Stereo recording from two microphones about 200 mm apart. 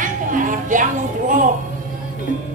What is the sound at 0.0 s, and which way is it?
Music, 40° right (ahead or behind).